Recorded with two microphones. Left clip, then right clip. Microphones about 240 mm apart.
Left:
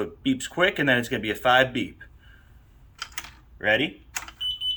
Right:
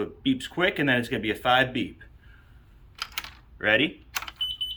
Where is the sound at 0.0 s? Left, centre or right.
Centre.